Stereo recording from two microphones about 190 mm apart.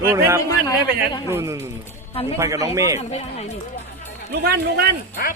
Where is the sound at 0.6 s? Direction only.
20° left (ahead or behind).